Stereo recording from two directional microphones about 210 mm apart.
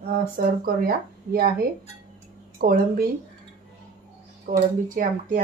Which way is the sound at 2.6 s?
45° right (ahead or behind).